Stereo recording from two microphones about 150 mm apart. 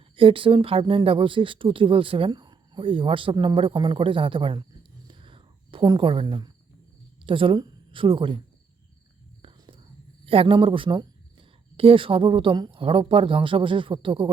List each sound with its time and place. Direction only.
0.2 s speech: 35° right (ahead or behind)
5.0 s whispering: 35° right (ahead or behind)
7.3 s speech: 35° right (ahead or behind)
9.4 s whispering: 35° right (ahead or behind)
10.2 s speech: 35° right (ahead or behind)